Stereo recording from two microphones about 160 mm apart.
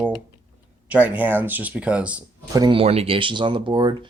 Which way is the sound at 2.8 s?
40° right (ahead or behind).